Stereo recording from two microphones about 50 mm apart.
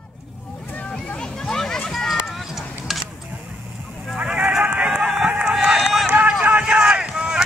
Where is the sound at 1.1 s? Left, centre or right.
Centre.